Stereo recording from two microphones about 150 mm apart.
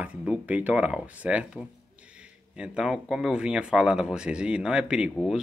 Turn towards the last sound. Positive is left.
turn(degrees=-5)  # may be behind; listen again after turning